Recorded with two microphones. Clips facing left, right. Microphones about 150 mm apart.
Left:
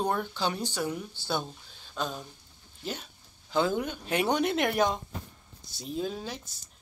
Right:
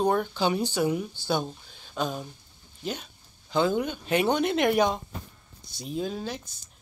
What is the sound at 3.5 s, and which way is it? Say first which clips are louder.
Speech: right 3 dB; 5° left (ahead or behind).